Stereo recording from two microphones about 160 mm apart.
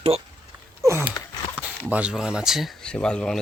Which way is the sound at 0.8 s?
15° right (ahead or behind).